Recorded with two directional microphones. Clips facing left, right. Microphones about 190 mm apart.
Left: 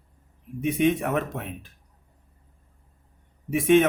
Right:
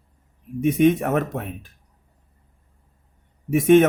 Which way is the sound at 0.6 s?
45° right (ahead or behind).